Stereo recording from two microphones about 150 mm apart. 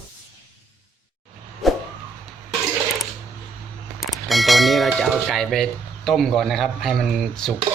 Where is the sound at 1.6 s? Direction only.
Centre (ahead or behind).